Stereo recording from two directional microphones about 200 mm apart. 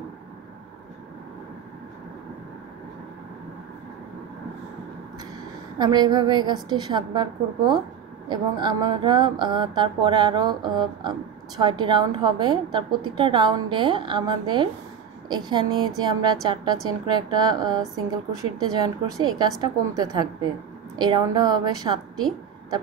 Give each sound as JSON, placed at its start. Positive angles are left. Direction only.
{"t": 5.8, "sound": "speech", "side_deg": -20}